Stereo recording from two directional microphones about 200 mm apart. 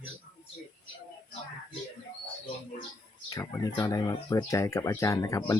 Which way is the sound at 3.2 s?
15° left (ahead or behind).